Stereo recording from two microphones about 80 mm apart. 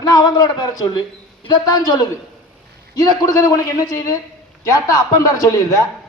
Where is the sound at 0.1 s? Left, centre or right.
Left.